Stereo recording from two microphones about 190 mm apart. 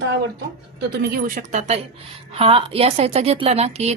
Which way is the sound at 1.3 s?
40° right (ahead or behind).